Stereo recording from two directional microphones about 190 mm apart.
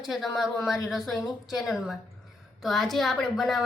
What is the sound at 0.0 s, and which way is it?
A woman's voice, centre (ahead or behind).